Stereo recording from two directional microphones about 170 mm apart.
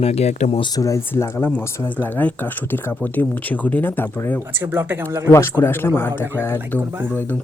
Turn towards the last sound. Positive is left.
turn(degrees=10)  # may be behind; listen again after turning